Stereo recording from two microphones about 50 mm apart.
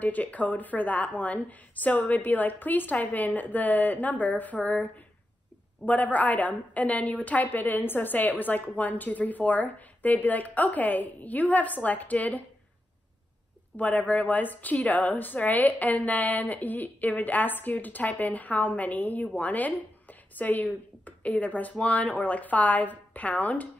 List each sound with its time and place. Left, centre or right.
0.0 s a woman's voice: left
13.7 s a woman's voice: left